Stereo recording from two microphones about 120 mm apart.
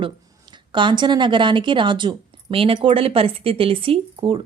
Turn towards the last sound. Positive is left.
turn(degrees=-50)  # may be behind; listen again after turning